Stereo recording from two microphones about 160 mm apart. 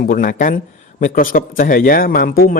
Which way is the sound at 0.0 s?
60° left (ahead or behind).